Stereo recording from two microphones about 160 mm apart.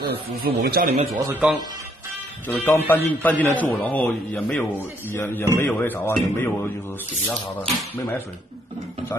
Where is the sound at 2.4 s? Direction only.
10° left (ahead or behind).